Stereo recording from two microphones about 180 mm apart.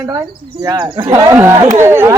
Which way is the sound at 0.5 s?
20° right (ahead or behind).